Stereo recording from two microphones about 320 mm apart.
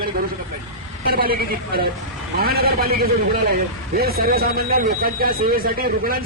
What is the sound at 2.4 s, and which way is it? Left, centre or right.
A man's voice, right.